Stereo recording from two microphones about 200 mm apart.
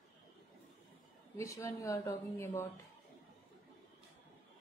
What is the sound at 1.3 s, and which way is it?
A woman's voice, 15° left (ahead or behind).